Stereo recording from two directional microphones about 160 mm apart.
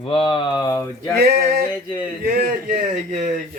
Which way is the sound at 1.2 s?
75° right (ahead or behind).